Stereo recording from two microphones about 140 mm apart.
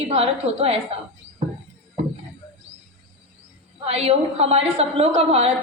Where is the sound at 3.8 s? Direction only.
45° right (ahead or behind).